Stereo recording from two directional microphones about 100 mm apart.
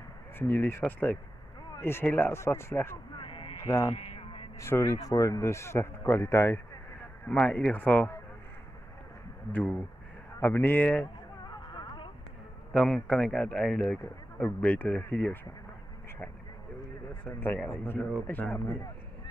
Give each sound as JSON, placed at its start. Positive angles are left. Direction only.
{"t": 0.4, "sound": "a man's voice", "side_deg": 20}
{"t": 3.2, "sound": "a sound", "side_deg": 55}
{"t": 3.6, "sound": "speech", "side_deg": 35}
{"t": 3.9, "sound": "a sound", "side_deg": 70}
{"t": 4.6, "sound": "a man's voice", "side_deg": 30}
{"t": 7.2, "sound": "speech", "side_deg": 15}
{"t": 9.5, "sound": "a man's voice", "side_deg": 15}
{"t": 11.4, "sound": "a sound", "side_deg": 45}
{"t": 12.7, "sound": "speech", "side_deg": 5}
{"t": 17.3, "sound": "a man's voice", "side_deg": 20}